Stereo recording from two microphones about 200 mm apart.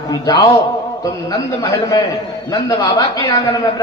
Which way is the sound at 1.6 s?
15° left (ahead or behind).